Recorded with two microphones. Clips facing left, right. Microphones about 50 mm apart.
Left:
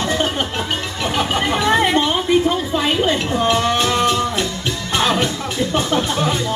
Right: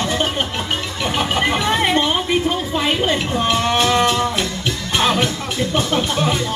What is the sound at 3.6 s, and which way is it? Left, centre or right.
Music, right.